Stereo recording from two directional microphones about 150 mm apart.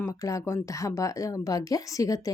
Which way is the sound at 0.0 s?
20° left (ahead or behind).